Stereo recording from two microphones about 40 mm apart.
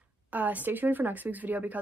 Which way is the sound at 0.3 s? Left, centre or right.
Right.